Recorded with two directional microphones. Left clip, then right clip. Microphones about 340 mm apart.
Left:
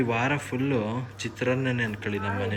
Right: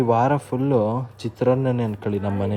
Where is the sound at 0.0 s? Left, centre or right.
Centre.